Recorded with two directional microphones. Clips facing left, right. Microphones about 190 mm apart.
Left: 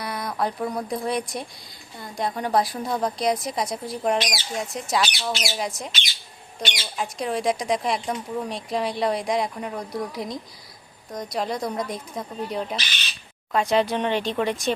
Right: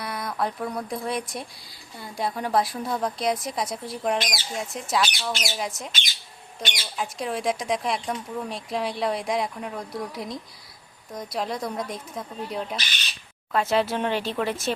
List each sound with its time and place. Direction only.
0.0 s speech: centre (ahead or behind)
6.9 s speech: centre (ahead or behind)